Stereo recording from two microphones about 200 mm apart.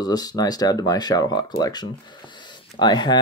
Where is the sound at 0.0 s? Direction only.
20° left (ahead or behind).